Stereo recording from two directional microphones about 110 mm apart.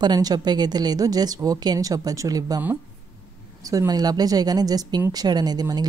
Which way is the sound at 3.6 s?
35° right (ahead or behind).